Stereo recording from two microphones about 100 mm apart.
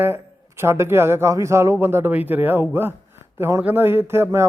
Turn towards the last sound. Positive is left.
turn(degrees=-25)  # may be behind; listen again after turning